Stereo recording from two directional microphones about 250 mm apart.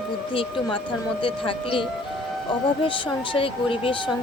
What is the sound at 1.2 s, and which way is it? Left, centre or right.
Speech, left.